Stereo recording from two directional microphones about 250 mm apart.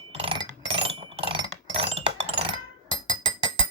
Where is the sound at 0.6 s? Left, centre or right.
Right.